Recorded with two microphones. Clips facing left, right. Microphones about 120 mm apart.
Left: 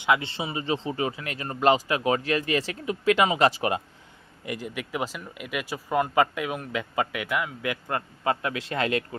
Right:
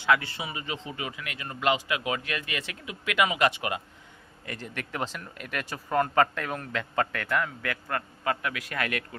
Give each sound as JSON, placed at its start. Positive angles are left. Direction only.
{"t": 0.0, "sound": "speech", "side_deg": 20}
{"t": 4.4, "sound": "speech", "side_deg": 10}